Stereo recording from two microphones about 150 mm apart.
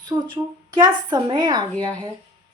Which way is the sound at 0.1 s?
30° right (ahead or behind).